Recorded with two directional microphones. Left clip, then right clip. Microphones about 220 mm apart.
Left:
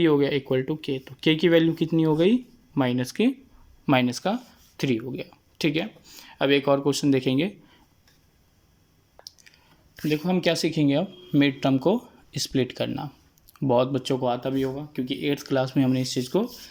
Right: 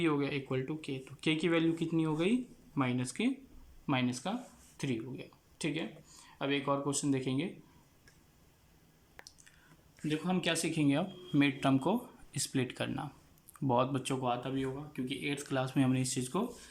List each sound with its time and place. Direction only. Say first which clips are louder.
0.0 s speech: left 12 dB; 30° left (ahead or behind)
10.1 s speech: left 10 dB; 25° left (ahead or behind)